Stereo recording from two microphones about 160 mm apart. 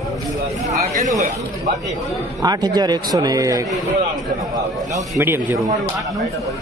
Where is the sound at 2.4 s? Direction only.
25° right (ahead or behind).